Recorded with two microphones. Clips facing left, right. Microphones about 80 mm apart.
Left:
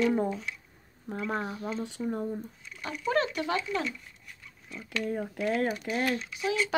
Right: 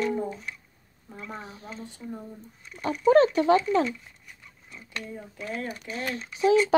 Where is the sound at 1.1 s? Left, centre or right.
Left.